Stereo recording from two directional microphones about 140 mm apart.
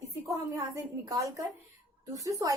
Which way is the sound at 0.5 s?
20° right (ahead or behind).